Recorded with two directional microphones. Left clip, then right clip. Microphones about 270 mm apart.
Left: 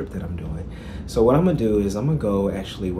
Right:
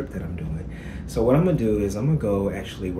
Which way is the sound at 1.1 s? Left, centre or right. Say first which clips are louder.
Left 3 dB; centre.